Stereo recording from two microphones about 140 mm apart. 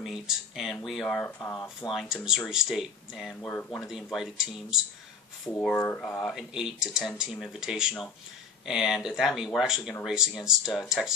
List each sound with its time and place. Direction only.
0.0 s speech: 5° right (ahead or behind)
1.8 s speech: centre (ahead or behind)
3.4 s speech: 10° left (ahead or behind)
3.8 s speech: 5° right (ahead or behind)